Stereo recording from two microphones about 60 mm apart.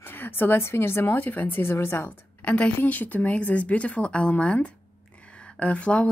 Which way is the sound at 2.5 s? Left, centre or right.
Centre.